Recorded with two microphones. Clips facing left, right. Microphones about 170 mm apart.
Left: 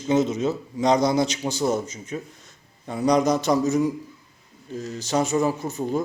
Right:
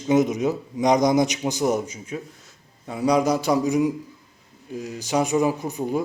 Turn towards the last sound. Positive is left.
turn(degrees=-10)  # may be behind; listen again after turning